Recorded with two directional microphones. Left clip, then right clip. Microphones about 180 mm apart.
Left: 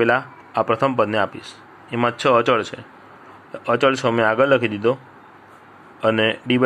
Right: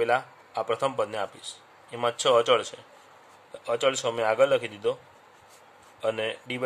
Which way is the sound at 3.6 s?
Centre (ahead or behind).